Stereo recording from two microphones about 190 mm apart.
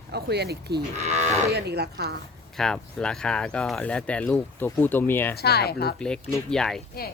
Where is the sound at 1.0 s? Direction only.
35° right (ahead or behind).